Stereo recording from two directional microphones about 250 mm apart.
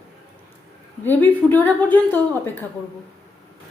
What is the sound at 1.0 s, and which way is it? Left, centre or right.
A woman's voice, centre.